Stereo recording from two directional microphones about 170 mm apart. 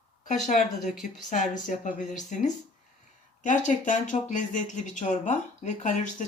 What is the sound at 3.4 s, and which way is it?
Speech, 45° left (ahead or behind).